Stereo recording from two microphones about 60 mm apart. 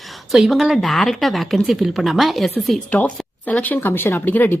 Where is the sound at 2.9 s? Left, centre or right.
Left.